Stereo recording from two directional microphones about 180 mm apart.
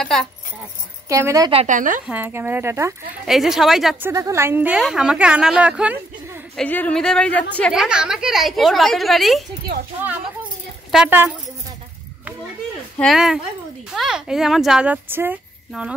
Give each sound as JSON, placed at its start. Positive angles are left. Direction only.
{"t": 0.0, "sound": "speech", "side_deg": 5}
{"t": 1.0, "sound": "a woman's voice", "side_deg": -15}
{"t": 1.5, "sound": "speech", "side_deg": -35}
{"t": 1.8, "sound": "speech", "side_deg": -45}
{"t": 2.0, "sound": "a woman's voice", "side_deg": -10}
{"t": 3.3, "sound": "speech", "side_deg": 0}
{"t": 4.1, "sound": "a woman's voice", "side_deg": -15}
{"t": 6.5, "sound": "speech", "side_deg": 5}
{"t": 10.9, "sound": "speech", "side_deg": -5}
{"t": 13.0, "sound": "speech", "side_deg": 0}